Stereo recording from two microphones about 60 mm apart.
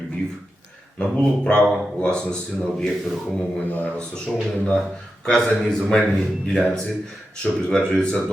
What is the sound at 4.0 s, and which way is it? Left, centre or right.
A man's voice, centre.